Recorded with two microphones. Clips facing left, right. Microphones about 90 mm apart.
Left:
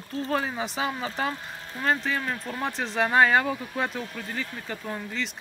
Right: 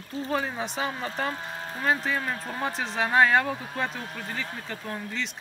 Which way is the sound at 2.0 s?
Centre (ahead or behind).